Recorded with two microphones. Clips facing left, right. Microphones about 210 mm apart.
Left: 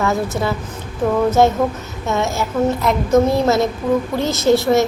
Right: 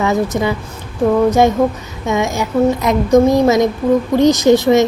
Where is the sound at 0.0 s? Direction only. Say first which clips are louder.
Right 3 dB; 15° right (ahead or behind).